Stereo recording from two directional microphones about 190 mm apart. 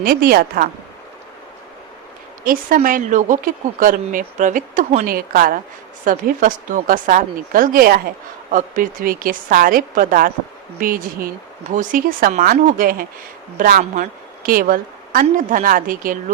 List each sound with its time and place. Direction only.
0.0 s speech: 50° right (ahead or behind)
2.4 s speech: 50° right (ahead or behind)